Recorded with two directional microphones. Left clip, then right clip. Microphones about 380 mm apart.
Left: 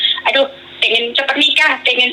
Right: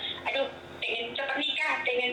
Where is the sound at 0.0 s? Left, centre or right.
Left.